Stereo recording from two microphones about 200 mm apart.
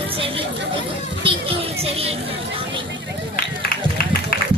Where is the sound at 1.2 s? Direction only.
30° right (ahead or behind).